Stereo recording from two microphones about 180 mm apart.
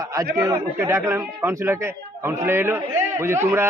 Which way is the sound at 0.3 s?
15° right (ahead or behind).